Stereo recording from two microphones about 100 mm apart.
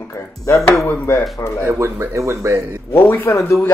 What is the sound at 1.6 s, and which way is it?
A man's voice, 25° right (ahead or behind).